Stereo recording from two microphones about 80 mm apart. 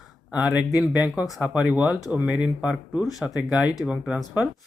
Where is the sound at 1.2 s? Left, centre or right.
Centre.